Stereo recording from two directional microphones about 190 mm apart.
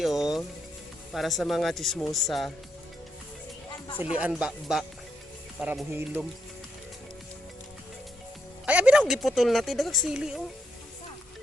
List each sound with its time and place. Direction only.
0.0 s music: centre (ahead or behind)
1.1 s a woman's voice: centre (ahead or behind)
3.8 s speech: 25° left (ahead or behind)
4.1 s a woman's voice: 5° right (ahead or behind)
8.6 s a woman's voice: 5° right (ahead or behind)